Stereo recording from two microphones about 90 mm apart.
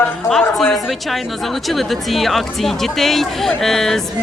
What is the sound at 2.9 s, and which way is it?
Speech, 5° left (ahead or behind).